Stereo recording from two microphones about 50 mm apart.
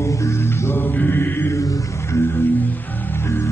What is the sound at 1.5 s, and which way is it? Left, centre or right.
Music, left.